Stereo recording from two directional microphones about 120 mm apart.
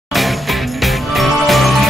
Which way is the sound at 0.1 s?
Centre (ahead or behind).